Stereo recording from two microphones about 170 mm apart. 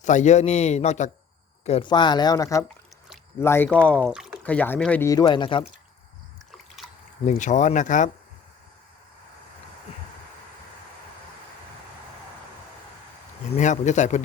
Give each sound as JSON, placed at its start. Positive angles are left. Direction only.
{"t": 0.0, "sound": "a man's voice", "side_deg": 45}
{"t": 1.9, "sound": "speech", "side_deg": 25}
{"t": 4.1, "sound": "speech", "side_deg": -5}
{"t": 4.4, "sound": "speech", "side_deg": 10}
{"t": 5.0, "sound": "speech", "side_deg": 25}
{"t": 6.5, "sound": "a sound", "side_deg": 0}
{"t": 7.3, "sound": "speech", "side_deg": 45}
{"t": 13.5, "sound": "speech", "side_deg": 45}